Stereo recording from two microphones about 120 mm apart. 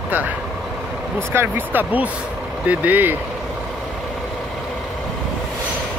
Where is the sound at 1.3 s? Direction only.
20° right (ahead or behind).